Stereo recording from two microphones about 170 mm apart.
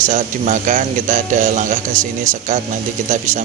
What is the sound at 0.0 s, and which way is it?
A man's voice, 50° right (ahead or behind).